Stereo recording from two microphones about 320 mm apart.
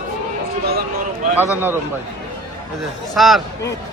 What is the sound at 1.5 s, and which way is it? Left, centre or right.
Speech, centre.